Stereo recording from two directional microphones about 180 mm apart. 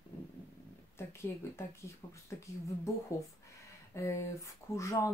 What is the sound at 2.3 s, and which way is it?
Speech, 15° left (ahead or behind).